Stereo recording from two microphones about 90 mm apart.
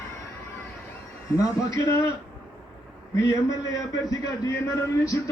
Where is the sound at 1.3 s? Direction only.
35° left (ahead or behind).